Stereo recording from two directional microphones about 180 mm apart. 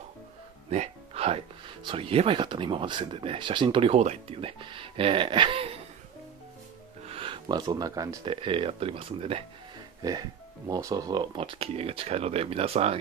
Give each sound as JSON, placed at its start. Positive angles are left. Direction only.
{"t": 0.7, "sound": "music", "side_deg": -35}
{"t": 1.9, "sound": "speech", "side_deg": -30}
{"t": 7.1, "sound": "speech", "side_deg": -30}
{"t": 10.7, "sound": "speech", "side_deg": -20}